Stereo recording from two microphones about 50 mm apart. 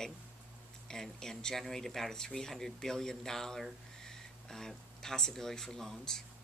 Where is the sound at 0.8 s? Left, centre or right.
Centre.